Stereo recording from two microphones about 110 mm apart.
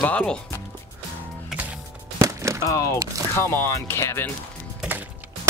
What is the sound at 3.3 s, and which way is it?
Speech, 20° left (ahead or behind).